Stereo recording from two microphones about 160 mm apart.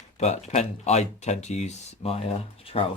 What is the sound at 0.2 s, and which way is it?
Speech, 45° left (ahead or behind).